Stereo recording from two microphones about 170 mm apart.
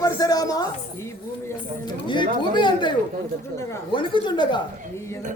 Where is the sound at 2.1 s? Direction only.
25° left (ahead or behind).